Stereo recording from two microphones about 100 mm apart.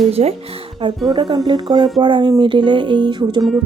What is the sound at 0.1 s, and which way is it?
Speech, 90° right.